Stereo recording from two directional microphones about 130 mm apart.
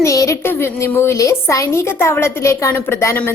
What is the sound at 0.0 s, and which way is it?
A woman's voice, 25° left (ahead or behind).